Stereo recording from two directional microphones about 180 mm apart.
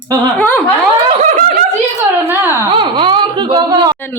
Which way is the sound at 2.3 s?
10° right (ahead or behind).